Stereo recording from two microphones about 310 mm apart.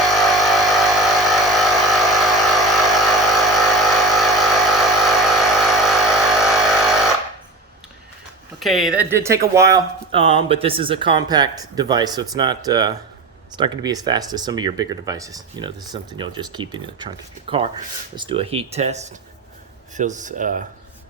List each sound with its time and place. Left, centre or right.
0.1 s vehicle: centre
8.5 s speech: centre
18.2 s speech: centre